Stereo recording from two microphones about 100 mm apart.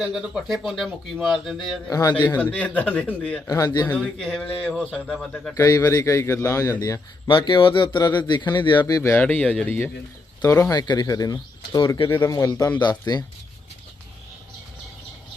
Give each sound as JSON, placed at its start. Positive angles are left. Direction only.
{"t": 0.0, "sound": "speech", "side_deg": -5}
{"t": 1.9, "sound": "a man's voice", "side_deg": 35}
{"t": 2.4, "sound": "a man's voice", "side_deg": 15}
{"t": 3.4, "sound": "a man's voice", "side_deg": 35}
{"t": 3.8, "sound": "a man's voice", "side_deg": 15}
{"t": 5.5, "sound": "a man's voice", "side_deg": 35}
{"t": 7.3, "sound": "speech", "side_deg": 55}
{"t": 9.0, "sound": "speech", "side_deg": 30}
{"t": 9.2, "sound": "a man's voice", "side_deg": 15}
{"t": 10.7, "sound": "a man's voice", "side_deg": 45}
{"t": 12.0, "sound": "speech", "side_deg": 25}
{"t": 12.8, "sound": "speech", "side_deg": 45}